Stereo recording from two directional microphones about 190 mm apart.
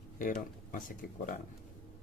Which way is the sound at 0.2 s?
45° left (ahead or behind).